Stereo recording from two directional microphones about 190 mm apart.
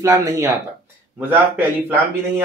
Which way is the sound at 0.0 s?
20° right (ahead or behind).